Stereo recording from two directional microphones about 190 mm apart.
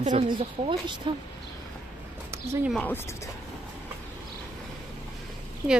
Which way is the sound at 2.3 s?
15° right (ahead or behind).